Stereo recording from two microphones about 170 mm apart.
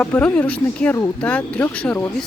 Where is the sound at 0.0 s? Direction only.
10° left (ahead or behind).